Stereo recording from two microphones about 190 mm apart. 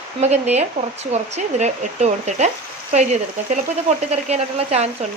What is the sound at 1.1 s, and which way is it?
Speech, 35° right (ahead or behind).